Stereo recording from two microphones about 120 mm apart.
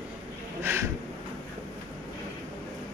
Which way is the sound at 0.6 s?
20° right (ahead or behind).